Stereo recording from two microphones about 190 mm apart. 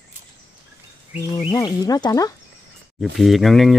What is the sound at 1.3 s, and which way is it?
Speech, 20° left (ahead or behind).